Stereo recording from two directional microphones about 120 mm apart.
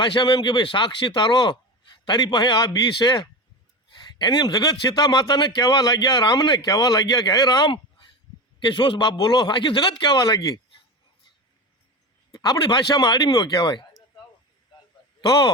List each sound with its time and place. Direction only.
0.0 s speech: 40° left (ahead or behind)
4.2 s speech: 35° left (ahead or behind)
12.3 s speech: 30° left (ahead or behind)
15.2 s speech: 35° left (ahead or behind)